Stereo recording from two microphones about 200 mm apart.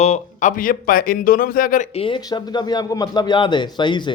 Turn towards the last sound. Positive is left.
turn(degrees=25)  # may be behind; listen again after turning